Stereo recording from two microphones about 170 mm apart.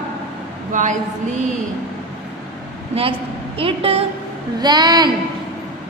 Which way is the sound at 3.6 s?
35° right (ahead or behind).